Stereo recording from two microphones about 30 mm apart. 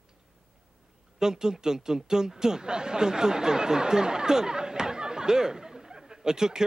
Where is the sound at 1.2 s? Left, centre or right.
Right.